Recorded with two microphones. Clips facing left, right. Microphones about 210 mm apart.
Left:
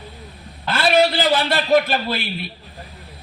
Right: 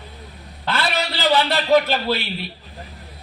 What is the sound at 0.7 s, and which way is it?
A man's voice, 50° left (ahead or behind).